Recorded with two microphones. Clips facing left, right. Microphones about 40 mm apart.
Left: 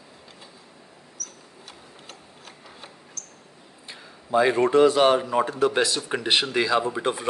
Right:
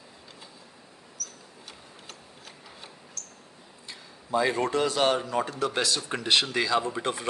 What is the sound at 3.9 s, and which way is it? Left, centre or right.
A man's voice, left.